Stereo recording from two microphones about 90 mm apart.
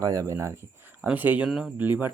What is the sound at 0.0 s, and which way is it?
Speech, 40° right (ahead or behind).